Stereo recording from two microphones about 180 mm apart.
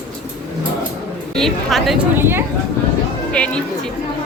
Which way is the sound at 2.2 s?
10° right (ahead or behind).